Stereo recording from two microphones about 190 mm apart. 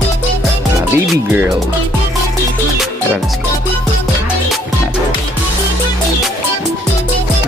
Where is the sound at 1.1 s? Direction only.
5° right (ahead or behind).